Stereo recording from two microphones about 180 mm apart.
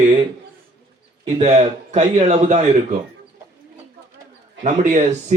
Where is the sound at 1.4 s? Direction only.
40° right (ahead or behind).